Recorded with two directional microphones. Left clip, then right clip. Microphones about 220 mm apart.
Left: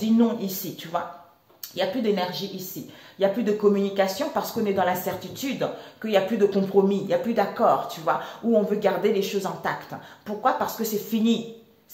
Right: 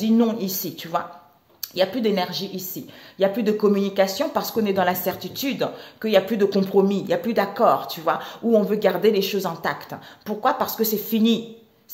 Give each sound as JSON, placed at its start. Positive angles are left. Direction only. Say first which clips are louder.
{"t": 0.0, "sound": "speech", "louder": "right 2 dB", "side_deg": -45}